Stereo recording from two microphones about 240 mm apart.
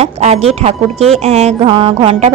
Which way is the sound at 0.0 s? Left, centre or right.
Right.